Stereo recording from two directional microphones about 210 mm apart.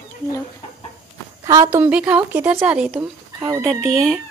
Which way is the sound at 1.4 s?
15° right (ahead or behind).